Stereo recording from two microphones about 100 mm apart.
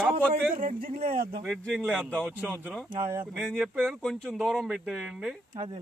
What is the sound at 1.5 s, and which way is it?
Speech, 5° left (ahead or behind).